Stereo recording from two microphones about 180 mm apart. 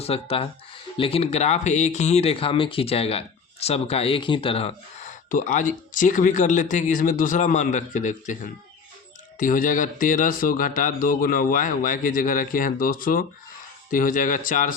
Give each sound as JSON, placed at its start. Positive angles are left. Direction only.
{"t": 0.0, "sound": "speech", "side_deg": 35}
{"t": 9.4, "sound": "speech", "side_deg": 45}